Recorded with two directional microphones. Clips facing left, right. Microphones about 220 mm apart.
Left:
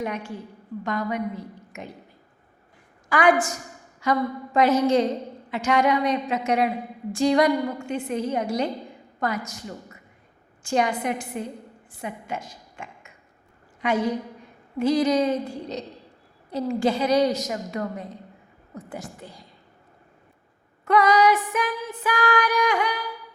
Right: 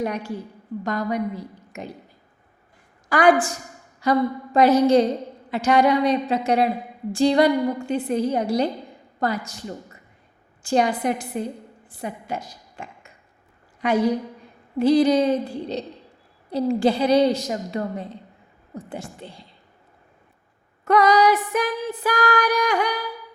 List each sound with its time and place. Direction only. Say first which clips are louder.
0.0 s music: right 4 dB; 40° right (ahead or behind)
3.1 s music: right 3 dB; 35° right (ahead or behind)
9.2 s a woman's voice: right 3 dB; 30° right (ahead or behind)
10.6 s music: right 3 dB; 35° right (ahead or behind)
11.9 s a sound: right 2 dB; 35° right (ahead or behind)
13.8 s music: right 4 dB; 35° right (ahead or behind)
18.7 s speech: right 2 dB; 30° right (ahead or behind)
20.8 s music: right 2 dB; 40° right (ahead or behind)